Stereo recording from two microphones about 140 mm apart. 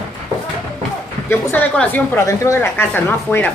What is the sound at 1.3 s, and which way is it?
Speech, 15° left (ahead or behind).